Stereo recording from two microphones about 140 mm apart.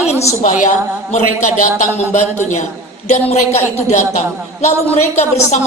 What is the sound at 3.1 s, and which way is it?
A woman's voice, 55° left (ahead or behind).